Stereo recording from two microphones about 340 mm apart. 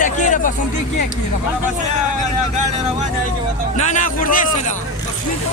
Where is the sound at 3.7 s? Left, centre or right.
Left.